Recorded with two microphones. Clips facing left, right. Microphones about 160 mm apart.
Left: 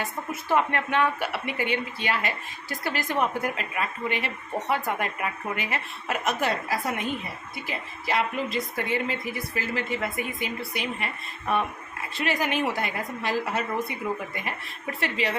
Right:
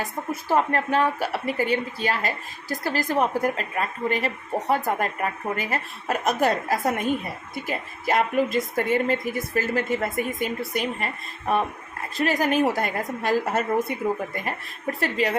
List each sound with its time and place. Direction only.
0.0 s a woman's voice: 35° right (ahead or behind)
15.0 s a woman's voice: 45° right (ahead or behind)